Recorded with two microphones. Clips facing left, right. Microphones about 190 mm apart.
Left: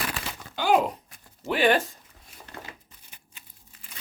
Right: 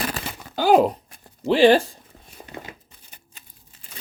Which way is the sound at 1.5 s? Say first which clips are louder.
Right 7 dB; 30° right (ahead or behind).